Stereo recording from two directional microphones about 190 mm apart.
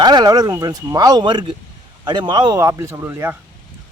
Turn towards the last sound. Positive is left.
turn(degrees=-15)  # may be behind; listen again after turning